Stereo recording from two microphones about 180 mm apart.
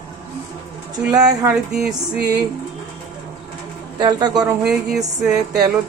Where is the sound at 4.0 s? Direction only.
25° right (ahead or behind).